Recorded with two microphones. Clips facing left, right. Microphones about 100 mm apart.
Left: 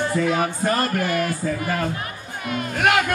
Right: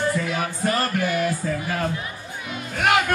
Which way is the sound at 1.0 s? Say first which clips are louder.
Even; 50° left (ahead or behind).